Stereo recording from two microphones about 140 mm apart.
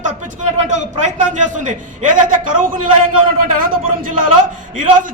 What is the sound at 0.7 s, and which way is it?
A man's voice, 55° right (ahead or behind).